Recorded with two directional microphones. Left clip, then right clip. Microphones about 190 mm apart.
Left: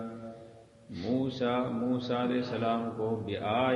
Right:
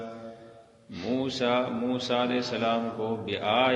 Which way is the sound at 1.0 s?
40° right (ahead or behind).